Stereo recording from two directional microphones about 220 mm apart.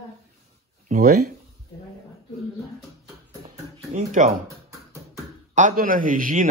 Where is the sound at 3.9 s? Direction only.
35° right (ahead or behind).